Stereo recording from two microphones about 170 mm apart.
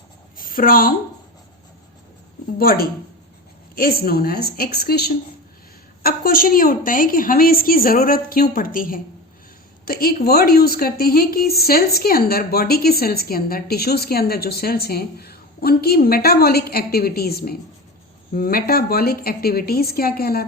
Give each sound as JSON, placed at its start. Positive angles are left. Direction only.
{"t": 0.3, "sound": "a sound", "side_deg": 55}
{"t": 2.6, "sound": "a woman's voice", "side_deg": 60}
{"t": 6.0, "sound": "a woman's voice", "side_deg": 60}